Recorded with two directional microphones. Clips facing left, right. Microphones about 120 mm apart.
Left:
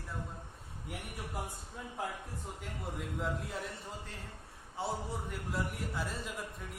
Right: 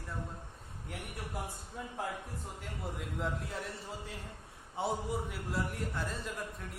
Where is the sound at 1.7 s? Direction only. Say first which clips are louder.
Right 1 dB; centre (ahead or behind).